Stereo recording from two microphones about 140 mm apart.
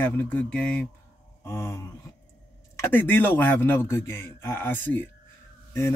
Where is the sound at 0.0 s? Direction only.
10° left (ahead or behind).